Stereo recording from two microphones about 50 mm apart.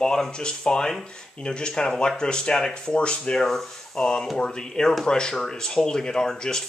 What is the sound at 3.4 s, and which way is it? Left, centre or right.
Speech, centre.